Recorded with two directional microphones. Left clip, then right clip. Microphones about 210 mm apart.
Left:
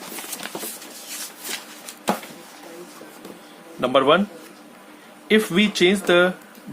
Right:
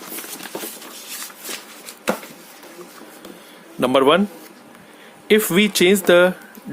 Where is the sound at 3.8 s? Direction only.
50° right (ahead or behind).